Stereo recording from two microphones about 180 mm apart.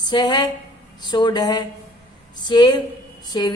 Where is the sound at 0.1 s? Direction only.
25° left (ahead or behind).